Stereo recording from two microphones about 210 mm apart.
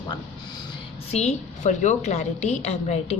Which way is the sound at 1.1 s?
30° left (ahead or behind).